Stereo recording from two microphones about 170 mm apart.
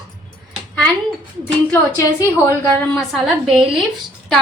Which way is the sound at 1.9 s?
20° left (ahead or behind).